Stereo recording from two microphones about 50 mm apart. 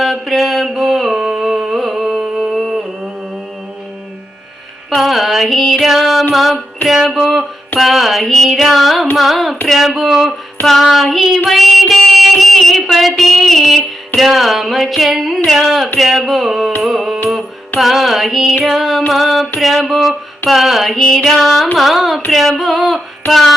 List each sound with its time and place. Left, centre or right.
0.0 s mantra: centre
4.9 s music: centre
11.4 s a sound: centre
14.2 s music: centre